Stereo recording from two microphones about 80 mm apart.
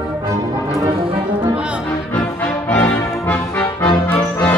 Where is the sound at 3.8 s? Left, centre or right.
Centre.